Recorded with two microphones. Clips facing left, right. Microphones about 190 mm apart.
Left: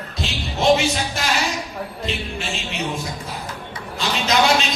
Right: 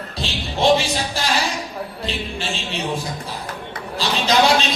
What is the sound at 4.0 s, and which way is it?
Speech, 30° right (ahead or behind).